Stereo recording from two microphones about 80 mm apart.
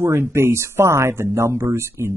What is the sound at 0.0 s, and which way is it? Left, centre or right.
Speech, right.